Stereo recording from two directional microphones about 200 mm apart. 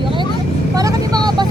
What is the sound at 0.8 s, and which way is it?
Speech, 20° right (ahead or behind).